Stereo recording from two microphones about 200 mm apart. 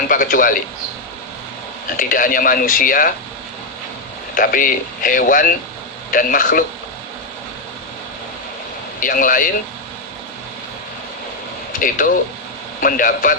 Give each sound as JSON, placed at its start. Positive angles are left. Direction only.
{"t": 0.1, "sound": "speech", "side_deg": 45}
{"t": 2.0, "sound": "speech", "side_deg": 45}
{"t": 4.4, "sound": "speech", "side_deg": 45}
{"t": 9.0, "sound": "speech", "side_deg": 45}
{"t": 11.8, "sound": "speech", "side_deg": 45}